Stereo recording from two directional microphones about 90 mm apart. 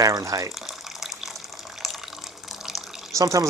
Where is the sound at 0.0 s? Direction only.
40° right (ahead or behind).